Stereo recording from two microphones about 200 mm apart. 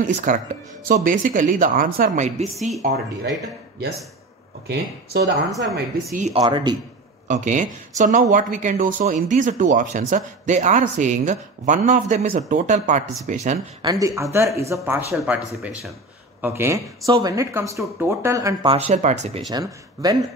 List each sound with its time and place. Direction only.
0.0 s speech: 40° right (ahead or behind)
2.4 s speech: centre (ahead or behind)
4.6 s speech: 55° right (ahead or behind)
6.1 s speech: 35° right (ahead or behind)
6.4 s speech: 20° right (ahead or behind)
7.2 s speech: 40° right (ahead or behind)
13.8 s speech: 15° right (ahead or behind)
15.1 s speech: 5° right (ahead or behind); by 18.8 s 20° right (ahead or behind)
18.9 s speech: 35° right (ahead or behind)
19.5 s speech: 20° right (ahead or behind)